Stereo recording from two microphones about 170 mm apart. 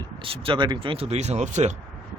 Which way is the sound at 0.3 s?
30° right (ahead or behind).